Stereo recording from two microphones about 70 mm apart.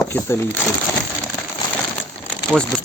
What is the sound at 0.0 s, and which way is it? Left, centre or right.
Speech, left.